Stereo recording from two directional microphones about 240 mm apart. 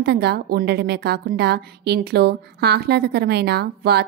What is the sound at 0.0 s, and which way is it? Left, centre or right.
A woman's voice, right.